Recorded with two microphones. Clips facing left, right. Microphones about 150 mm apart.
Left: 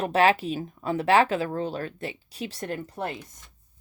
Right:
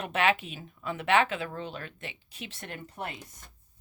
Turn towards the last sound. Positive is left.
turn(degrees=35)  # may be behind; listen again after turning